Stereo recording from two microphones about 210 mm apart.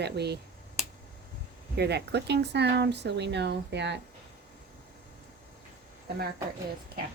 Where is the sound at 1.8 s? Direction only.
50° right (ahead or behind).